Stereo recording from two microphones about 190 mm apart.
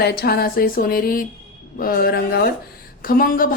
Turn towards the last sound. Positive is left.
turn(degrees=50)  # may be behind; listen again after turning